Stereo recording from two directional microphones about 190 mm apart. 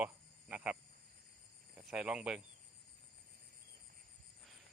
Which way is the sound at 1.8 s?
5° right (ahead or behind).